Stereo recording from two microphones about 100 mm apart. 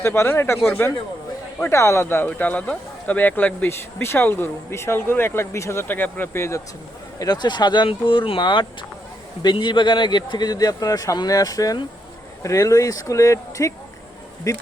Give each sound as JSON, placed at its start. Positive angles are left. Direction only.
{"t": 0.0, "sound": "speech", "side_deg": 20}
{"t": 7.2, "sound": "a man's voice", "side_deg": 45}